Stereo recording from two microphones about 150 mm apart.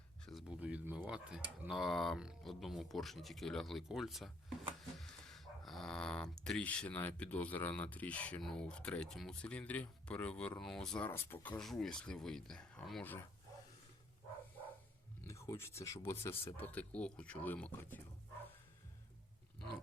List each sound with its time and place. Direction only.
0.3 s speech: 5° right (ahead or behind)
11.1 s speech: 15° left (ahead or behind)
15.2 s speech: 20° left (ahead or behind)